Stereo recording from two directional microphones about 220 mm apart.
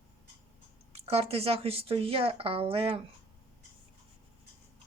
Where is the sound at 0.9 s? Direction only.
25° right (ahead or behind).